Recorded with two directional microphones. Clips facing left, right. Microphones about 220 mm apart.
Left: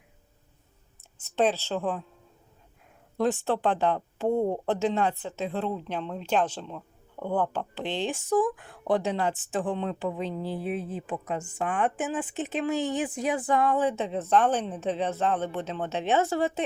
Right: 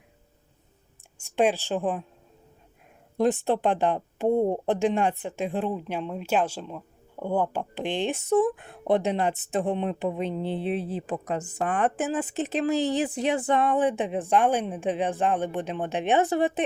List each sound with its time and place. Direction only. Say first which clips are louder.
1.2 s speech: right 2 dB; 10° right (ahead or behind)
3.2 s speech: right 3 dB; 15° right (ahead or behind)